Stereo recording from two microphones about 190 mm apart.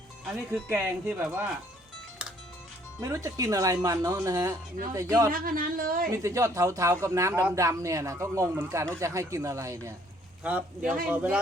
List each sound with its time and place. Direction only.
0.5 s speech: 10° right (ahead or behind)
3.0 s speech: 15° right (ahead or behind)
5.3 s speech: 50° right (ahead or behind)
6.1 s speech: 15° right (ahead or behind)